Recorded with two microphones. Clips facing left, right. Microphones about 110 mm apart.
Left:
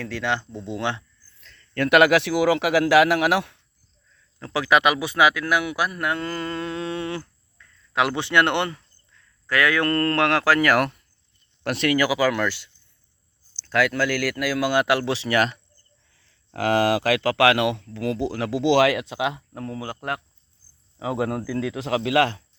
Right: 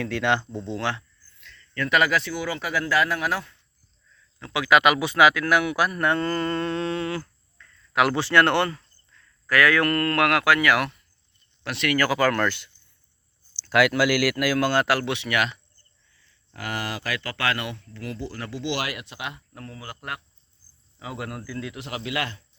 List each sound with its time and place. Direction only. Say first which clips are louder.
0.0 s speech: right 2 dB; centre (ahead or behind)
0.6 s speech: left 1 dB; 15° left (ahead or behind)
1.4 s a sound: right 2 dB; 40° left (ahead or behind)
1.7 s speech: left 6 dB; 65° left (ahead or behind)
4.4 s speech: even; 35° left (ahead or behind)
4.8 s a man's voice: right 1 dB; 15° left (ahead or behind); by 11.9 s 45° left (ahead or behind)
11.9 s a man's voice: right 2 dB; 10° left (ahead or behind)
14.7 s speech: left 2 dB; 15° left (ahead or behind); by 15.6 s 40° left (ahead or behind)
16.1 s speech: left 11 dB; 85° left
21.8 s speech: left 11 dB; 90° left